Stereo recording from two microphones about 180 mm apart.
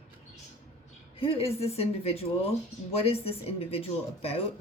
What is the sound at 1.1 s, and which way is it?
Speech, 30° left (ahead or behind).